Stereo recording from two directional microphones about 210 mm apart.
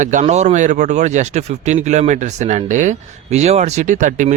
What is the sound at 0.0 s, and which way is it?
Speech, 35° right (ahead or behind).